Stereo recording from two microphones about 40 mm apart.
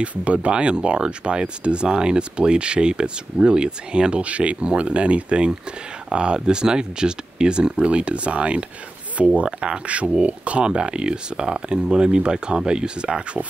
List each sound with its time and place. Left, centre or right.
0.0 s speech: right